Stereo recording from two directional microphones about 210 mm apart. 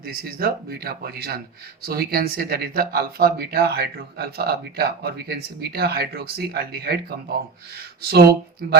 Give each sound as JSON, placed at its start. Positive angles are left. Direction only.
{"t": 0.0, "sound": "speech", "side_deg": -45}